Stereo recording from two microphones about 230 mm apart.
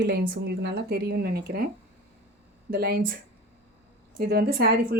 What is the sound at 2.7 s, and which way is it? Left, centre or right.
Speech, right.